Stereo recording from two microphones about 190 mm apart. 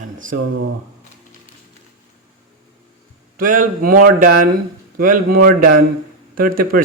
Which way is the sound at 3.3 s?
45° right (ahead or behind).